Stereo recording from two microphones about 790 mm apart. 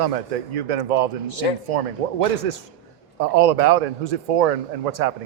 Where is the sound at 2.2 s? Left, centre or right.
Right.